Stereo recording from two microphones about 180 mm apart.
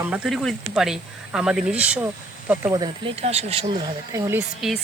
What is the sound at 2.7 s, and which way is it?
Speech, 25° right (ahead or behind).